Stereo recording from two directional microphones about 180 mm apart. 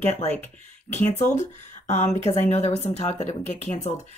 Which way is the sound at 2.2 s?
35° left (ahead or behind).